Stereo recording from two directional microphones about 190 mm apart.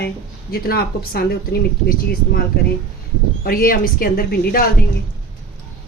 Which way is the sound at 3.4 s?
50° left (ahead or behind).